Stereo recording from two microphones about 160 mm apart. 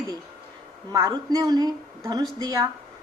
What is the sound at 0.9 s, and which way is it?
Speech, 20° right (ahead or behind).